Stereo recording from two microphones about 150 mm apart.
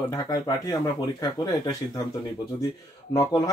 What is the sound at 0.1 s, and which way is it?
Speech, 20° left (ahead or behind).